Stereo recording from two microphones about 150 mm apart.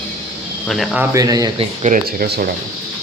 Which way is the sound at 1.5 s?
50° right (ahead or behind).